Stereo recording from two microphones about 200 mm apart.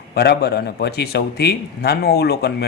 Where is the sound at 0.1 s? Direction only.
55° left (ahead or behind).